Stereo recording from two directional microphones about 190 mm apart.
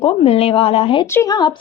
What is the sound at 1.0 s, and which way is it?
Speech, 15° left (ahead or behind).